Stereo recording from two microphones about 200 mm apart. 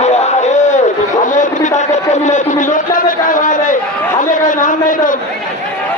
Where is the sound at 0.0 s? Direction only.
35° left (ahead or behind).